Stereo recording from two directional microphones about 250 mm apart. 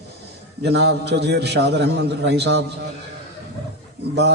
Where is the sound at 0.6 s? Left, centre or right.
Right.